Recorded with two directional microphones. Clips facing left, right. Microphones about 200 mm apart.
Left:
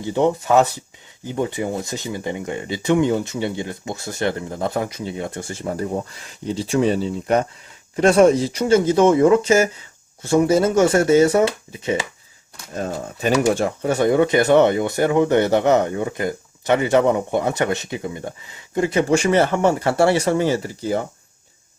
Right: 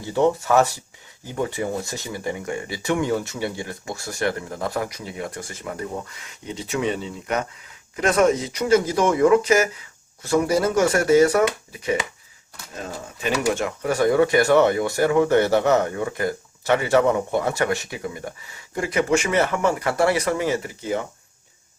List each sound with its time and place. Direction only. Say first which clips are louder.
0.0 s speech: left 1 dB; 20° left (ahead or behind)
13.4 s speech: left 4 dB; 35° left (ahead or behind)